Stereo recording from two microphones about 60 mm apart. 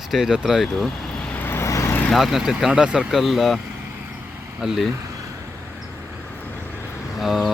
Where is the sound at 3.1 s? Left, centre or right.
Centre.